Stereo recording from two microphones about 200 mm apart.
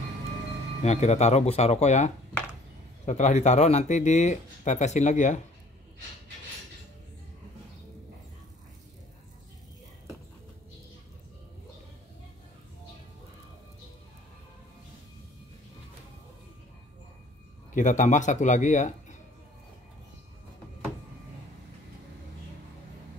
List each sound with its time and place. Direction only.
0.8 s speech: 35° left (ahead or behind)
17.7 s speech: 35° left (ahead or behind)